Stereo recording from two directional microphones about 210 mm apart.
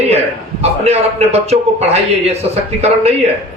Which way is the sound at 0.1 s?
30° right (ahead or behind).